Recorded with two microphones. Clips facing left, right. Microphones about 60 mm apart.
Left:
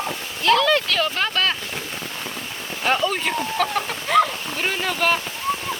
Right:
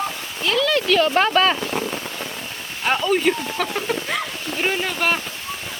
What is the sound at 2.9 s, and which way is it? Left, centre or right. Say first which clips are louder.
Speech: right 3 dB; centre.